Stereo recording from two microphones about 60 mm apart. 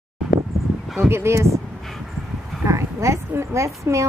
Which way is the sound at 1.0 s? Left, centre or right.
Right.